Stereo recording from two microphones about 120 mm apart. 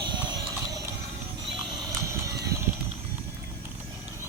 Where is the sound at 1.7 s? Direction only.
25° right (ahead or behind).